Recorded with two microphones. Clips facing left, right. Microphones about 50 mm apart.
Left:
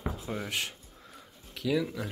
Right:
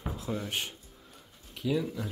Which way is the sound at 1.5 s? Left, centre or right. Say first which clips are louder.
Left 1 dB; left.